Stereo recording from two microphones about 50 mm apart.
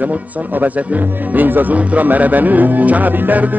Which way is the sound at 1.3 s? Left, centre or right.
Right.